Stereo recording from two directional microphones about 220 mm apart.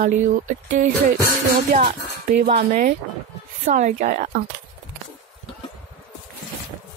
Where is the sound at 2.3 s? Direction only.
45° right (ahead or behind).